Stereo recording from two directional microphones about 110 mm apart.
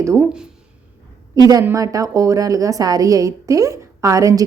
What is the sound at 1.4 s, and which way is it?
A woman's voice, 35° right (ahead or behind).